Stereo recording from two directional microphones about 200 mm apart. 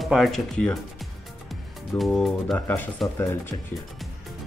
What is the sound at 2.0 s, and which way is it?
Speech, centre (ahead or behind).